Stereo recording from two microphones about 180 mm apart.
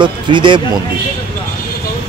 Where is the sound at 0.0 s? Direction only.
25° right (ahead or behind).